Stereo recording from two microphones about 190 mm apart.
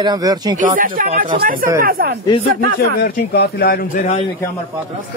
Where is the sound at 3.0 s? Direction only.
60° left (ahead or behind).